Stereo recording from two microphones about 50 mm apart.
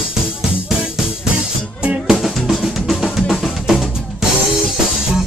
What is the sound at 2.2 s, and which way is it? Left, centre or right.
Drum, centre.